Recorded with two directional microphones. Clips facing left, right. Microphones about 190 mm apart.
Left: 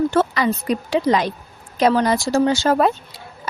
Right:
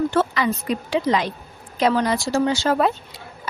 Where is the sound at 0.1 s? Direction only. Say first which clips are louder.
Left 2 dB; 40° left (ahead or behind).